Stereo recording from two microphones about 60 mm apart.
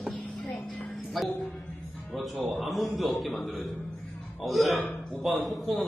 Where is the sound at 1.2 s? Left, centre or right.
Centre.